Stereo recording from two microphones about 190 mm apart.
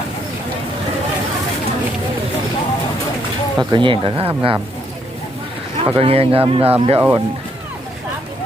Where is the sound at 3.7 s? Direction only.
25° right (ahead or behind).